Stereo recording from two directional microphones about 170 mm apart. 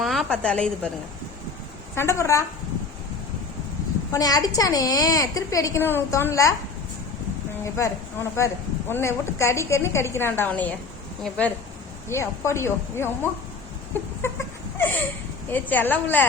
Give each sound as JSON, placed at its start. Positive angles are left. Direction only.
{"t": 0.0, "sound": "a woman's voice", "side_deg": 0}
{"t": 2.0, "sound": "a woman's voice", "side_deg": 15}
{"t": 4.1, "sound": "a woman's voice", "side_deg": 20}
{"t": 7.6, "sound": "a woman's voice", "side_deg": 15}
{"t": 14.2, "sound": "a sound", "side_deg": 15}
{"t": 15.4, "sound": "a woman's voice", "side_deg": 10}